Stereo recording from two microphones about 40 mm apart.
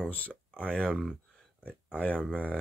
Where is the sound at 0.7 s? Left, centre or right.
Left.